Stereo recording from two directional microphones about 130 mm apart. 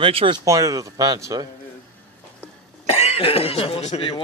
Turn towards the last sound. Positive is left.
turn(degrees=50)  # may be behind; listen again after turning